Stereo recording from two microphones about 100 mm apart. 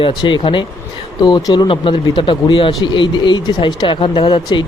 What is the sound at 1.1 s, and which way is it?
Speech, 45° left (ahead or behind).